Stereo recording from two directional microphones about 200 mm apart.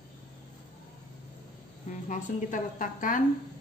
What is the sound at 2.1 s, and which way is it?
Speech, 40° left (ahead or behind).